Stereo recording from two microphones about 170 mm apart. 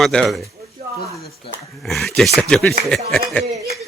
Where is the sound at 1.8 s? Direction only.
Centre (ahead or behind).